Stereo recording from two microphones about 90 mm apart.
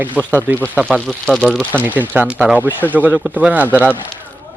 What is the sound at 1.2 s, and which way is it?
Speech, 5° left (ahead or behind).